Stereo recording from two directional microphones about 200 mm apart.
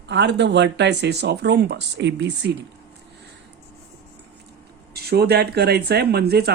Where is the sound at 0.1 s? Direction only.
60° right (ahead or behind).